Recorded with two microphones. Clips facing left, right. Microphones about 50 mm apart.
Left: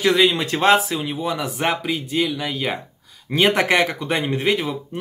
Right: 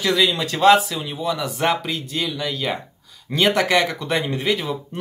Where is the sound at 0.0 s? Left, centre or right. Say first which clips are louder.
Left 2 dB; left.